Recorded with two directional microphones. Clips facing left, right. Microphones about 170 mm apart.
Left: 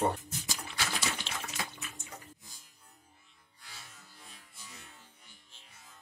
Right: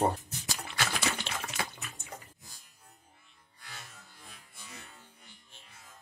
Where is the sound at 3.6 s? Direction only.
65° right (ahead or behind).